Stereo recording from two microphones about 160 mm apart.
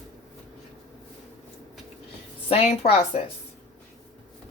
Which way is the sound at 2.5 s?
40° left (ahead or behind).